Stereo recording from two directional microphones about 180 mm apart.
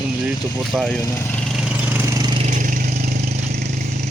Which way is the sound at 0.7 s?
5° left (ahead or behind).